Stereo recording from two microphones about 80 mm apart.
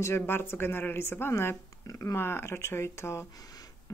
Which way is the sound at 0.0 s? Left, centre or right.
Left.